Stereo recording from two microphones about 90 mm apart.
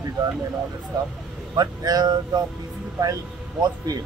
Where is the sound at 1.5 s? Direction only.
45° right (ahead or behind).